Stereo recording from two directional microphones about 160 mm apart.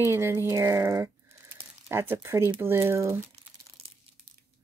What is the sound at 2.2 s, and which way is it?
Speech, 15° right (ahead or behind).